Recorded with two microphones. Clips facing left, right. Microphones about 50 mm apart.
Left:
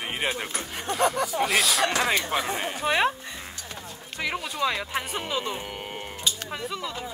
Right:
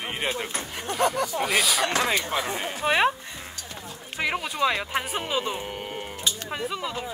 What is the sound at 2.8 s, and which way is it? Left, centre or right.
Speech, centre.